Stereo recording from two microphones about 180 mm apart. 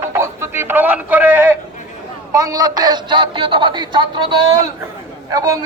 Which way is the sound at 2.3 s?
20° right (ahead or behind).